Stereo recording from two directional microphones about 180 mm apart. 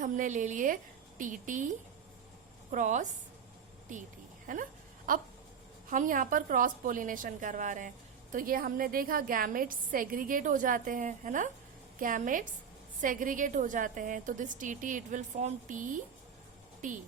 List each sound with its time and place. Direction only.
0.0 s a woman's voice: 45° right (ahead or behind)
4.5 s a woman's voice: 45° right (ahead or behind)